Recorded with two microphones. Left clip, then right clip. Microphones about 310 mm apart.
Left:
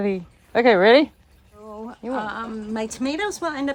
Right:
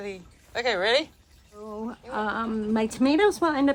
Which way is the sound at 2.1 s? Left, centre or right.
Centre.